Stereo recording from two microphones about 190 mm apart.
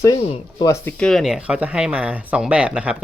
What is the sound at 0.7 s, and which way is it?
Speech, 10° left (ahead or behind).